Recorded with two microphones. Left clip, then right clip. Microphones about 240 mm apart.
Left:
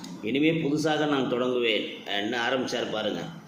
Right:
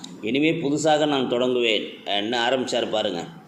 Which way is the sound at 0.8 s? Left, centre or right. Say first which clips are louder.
Right 8 dB; right.